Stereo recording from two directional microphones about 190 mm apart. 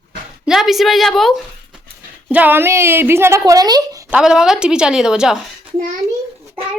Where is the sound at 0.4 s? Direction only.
Centre (ahead or behind).